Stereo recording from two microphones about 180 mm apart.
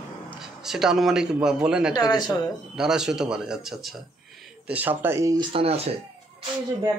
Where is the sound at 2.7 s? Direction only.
5° right (ahead or behind); by 6.4 s 35° right (ahead or behind).